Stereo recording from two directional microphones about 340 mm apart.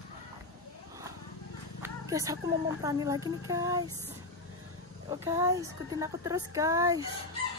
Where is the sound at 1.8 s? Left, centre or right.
Centre.